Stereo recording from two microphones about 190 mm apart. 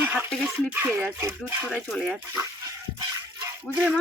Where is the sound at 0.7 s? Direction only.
10° right (ahead or behind).